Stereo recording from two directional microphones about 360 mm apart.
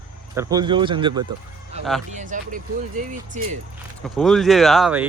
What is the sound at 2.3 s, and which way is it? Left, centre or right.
Speech, right.